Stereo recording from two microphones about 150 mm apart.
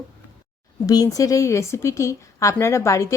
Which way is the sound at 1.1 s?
20° left (ahead or behind).